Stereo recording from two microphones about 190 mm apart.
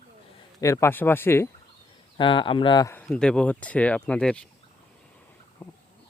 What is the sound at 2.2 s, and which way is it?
Speech, 25° left (ahead or behind).